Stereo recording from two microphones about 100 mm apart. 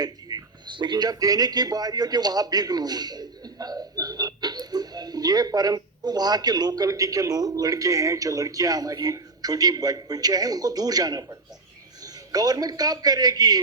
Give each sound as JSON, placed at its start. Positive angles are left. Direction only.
{"t": 0.0, "sound": "a man's voice", "side_deg": -40}